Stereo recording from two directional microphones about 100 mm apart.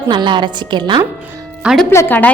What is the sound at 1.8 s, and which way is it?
Speech, 20° left (ahead or behind).